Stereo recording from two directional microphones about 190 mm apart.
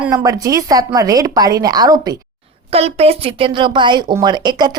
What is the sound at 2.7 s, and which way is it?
Speech, 35° right (ahead or behind).